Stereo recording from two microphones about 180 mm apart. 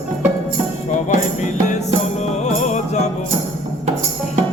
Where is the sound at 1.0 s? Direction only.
45° left (ahead or behind).